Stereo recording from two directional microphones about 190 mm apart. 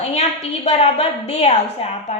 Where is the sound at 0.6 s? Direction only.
30° left (ahead or behind).